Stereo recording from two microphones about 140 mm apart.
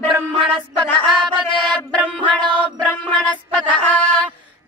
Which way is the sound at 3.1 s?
10° left (ahead or behind).